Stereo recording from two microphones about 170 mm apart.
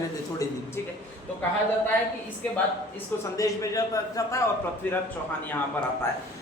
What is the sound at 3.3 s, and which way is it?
A man's voice, 20° left (ahead or behind).